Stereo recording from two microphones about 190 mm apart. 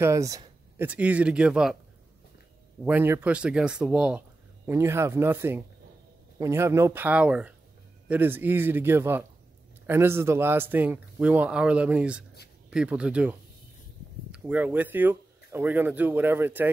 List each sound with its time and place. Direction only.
0.0 s a sound: 15° right (ahead or behind)
0.8 s speech: 5° right (ahead or behind)
2.8 s speech: 10° right (ahead or behind)